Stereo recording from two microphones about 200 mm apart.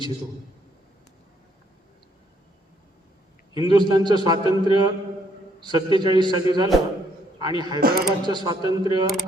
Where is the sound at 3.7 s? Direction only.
20° right (ahead or behind).